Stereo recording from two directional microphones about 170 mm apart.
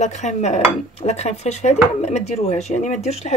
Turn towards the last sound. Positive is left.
turn(degrees=40)  # may be behind; listen again after turning